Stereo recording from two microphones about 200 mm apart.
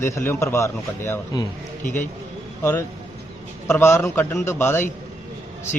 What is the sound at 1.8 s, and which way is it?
Speech, 40° left (ahead or behind).